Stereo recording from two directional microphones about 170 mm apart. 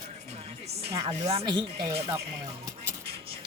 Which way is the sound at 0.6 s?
35° right (ahead or behind).